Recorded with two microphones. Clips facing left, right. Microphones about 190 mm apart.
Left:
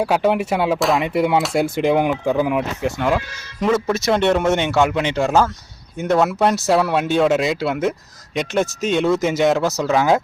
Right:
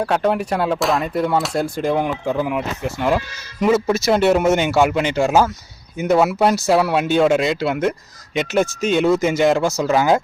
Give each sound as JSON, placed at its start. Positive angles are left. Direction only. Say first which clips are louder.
{"t": 0.0, "sound": "speech", "louder": "left 1 dB", "side_deg": 5}
{"t": 1.6, "sound": "speech", "louder": "left 3 dB", "side_deg": 25}
{"t": 1.9, "sound": "speech", "louder": "left 2 dB", "side_deg": 5}